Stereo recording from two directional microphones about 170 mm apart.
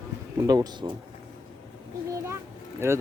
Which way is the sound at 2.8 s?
15° right (ahead or behind).